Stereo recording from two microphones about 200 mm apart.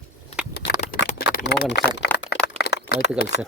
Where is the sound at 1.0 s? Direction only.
50° left (ahead or behind).